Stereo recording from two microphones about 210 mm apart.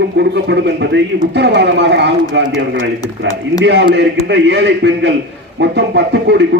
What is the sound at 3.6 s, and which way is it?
Speech, 55° right (ahead or behind).